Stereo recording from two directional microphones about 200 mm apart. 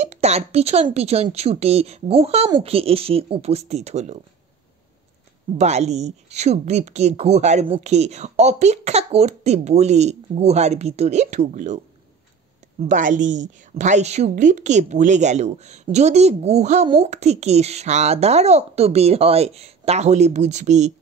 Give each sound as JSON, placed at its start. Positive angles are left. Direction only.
{"t": 0.0, "sound": "speech", "side_deg": -35}
{"t": 5.6, "sound": "speech", "side_deg": -35}
{"t": 12.8, "sound": "speech", "side_deg": -40}